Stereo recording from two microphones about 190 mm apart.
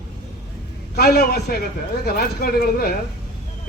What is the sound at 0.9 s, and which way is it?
A man's voice, 55° left (ahead or behind).